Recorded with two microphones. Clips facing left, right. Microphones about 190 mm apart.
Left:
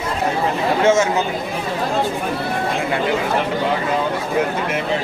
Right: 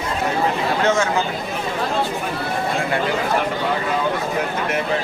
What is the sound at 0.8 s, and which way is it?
Chatter, 20° left (ahead or behind).